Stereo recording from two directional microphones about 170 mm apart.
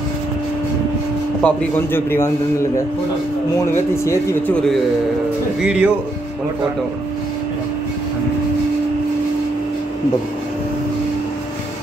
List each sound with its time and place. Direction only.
1.4 s speech: 15° left (ahead or behind)
3.7 s speech: 15° left (ahead or behind)
5.6 s speech: 5° right (ahead or behind)